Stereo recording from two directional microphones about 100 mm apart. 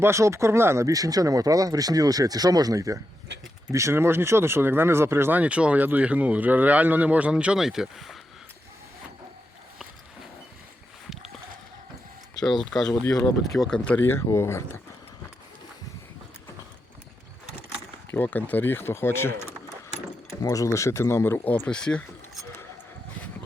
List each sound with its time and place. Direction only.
0.0 s speech: 30° right (ahead or behind); by 8.2 s centre (ahead or behind)
12.9 s speech: 35° left (ahead or behind)
13.7 s speech: 10° left (ahead or behind)
14.0 s speech: 25° left (ahead or behind)
18.1 s speech: 20° left (ahead or behind)
20.4 s speech: 35° left (ahead or behind); by 22.4 s 10° left (ahead or behind)